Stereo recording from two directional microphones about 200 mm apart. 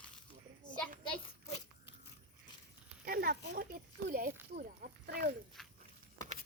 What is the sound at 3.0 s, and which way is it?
Speech, 45° right (ahead or behind).